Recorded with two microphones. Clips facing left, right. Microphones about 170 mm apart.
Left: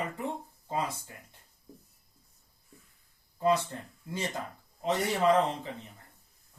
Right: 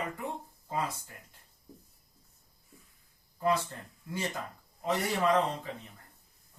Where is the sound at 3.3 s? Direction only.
25° left (ahead or behind).